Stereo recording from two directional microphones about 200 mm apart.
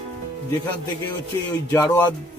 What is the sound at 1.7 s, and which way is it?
Music, 15° left (ahead or behind).